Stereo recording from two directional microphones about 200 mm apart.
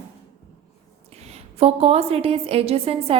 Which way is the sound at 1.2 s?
30° right (ahead or behind).